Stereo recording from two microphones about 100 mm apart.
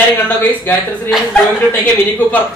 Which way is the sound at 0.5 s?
20° left (ahead or behind).